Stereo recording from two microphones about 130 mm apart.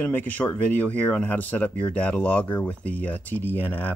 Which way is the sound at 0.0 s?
15° left (ahead or behind).